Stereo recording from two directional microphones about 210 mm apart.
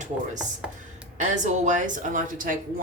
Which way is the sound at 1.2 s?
35° right (ahead or behind).